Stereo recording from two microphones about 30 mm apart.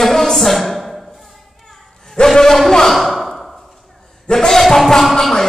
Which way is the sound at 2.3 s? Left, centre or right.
Centre.